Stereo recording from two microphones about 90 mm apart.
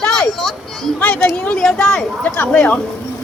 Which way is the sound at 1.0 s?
15° left (ahead or behind).